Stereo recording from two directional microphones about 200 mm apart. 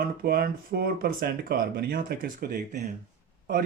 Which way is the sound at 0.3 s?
50° right (ahead or behind).